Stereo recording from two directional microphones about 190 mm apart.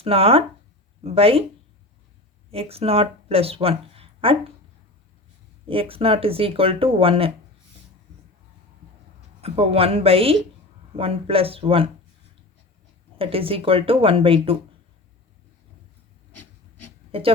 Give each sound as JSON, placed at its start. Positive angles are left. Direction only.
{"t": 0.0, "sound": "speech", "side_deg": -30}
{"t": 2.5, "sound": "speech", "side_deg": -30}
{"t": 5.6, "sound": "speech", "side_deg": -30}
{"t": 9.4, "sound": "speech", "side_deg": -30}
{"t": 13.1, "sound": "speech", "side_deg": -30}
{"t": 17.1, "sound": "speech", "side_deg": -30}